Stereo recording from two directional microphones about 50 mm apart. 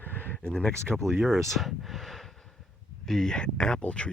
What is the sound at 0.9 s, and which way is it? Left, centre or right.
Speech, centre.